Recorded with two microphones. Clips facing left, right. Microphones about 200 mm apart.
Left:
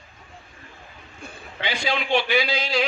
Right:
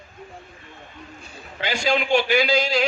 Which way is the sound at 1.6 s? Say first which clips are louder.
Right 4 dB; 45° right (ahead or behind).